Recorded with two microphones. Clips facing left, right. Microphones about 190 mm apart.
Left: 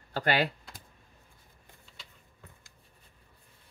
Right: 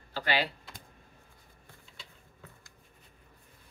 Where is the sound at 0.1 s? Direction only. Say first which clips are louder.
Left 3 dB; 50° left (ahead or behind).